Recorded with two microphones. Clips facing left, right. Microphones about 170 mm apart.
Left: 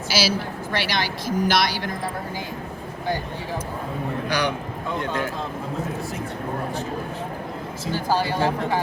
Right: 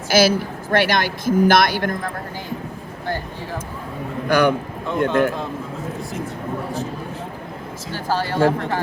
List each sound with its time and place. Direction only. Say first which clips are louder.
0.1 s a woman's voice: right 8 dB; 50° right (ahead or behind)
4.3 s a woman's voice: right 11 dB; 50° right (ahead or behind)
7.9 s speech: even; 15° left (ahead or behind)